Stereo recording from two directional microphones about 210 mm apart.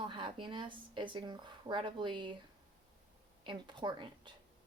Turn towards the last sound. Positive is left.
turn(degrees=-20)  # may be behind; listen again after turning